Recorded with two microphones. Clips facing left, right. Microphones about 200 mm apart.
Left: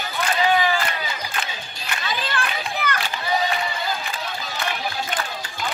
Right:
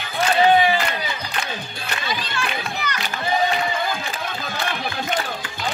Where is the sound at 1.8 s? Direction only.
55° left (ahead or behind).